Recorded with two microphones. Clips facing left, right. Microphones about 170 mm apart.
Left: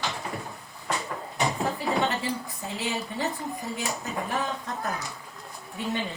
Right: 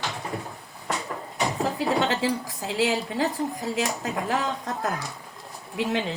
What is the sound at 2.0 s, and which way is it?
A woman's voice, 90° right.